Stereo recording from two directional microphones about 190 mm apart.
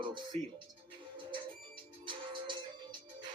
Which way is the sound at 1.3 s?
25° right (ahead or behind).